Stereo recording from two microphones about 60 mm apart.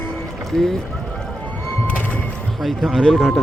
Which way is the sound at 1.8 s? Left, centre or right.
Left.